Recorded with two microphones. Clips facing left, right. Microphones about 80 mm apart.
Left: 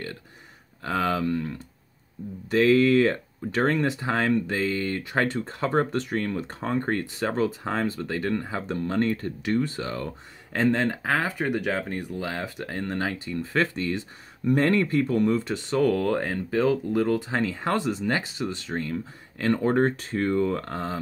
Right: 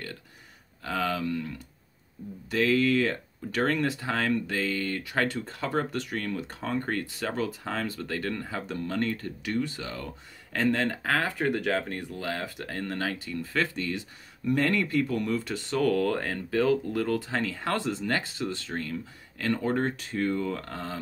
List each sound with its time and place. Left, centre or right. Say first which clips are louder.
0.8 s speech: left 4 dB; left
2.5 s speech: left 5 dB; left
10.5 s speech: left 3 dB; left